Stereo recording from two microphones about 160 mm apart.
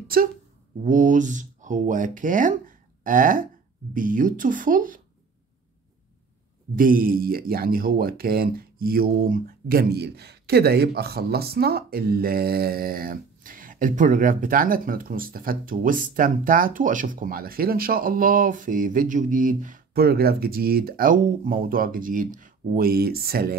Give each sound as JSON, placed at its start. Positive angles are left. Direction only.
{"t": 0.1, "sound": "speech", "side_deg": -65}
{"t": 0.8, "sound": "speech", "side_deg": -55}
{"t": 6.7, "sound": "speech", "side_deg": -60}